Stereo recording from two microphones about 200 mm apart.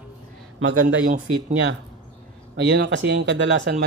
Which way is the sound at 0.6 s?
85° right.